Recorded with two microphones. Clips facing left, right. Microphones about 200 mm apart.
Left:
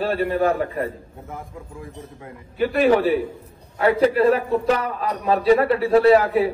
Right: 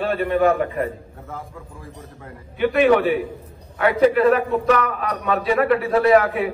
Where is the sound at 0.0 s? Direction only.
30° left (ahead or behind).